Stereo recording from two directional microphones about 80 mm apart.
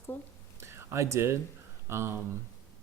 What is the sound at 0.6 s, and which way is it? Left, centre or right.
Speech, right.